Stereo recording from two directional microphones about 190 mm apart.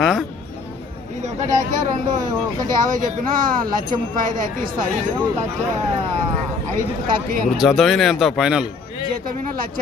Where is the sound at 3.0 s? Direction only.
45° right (ahead or behind).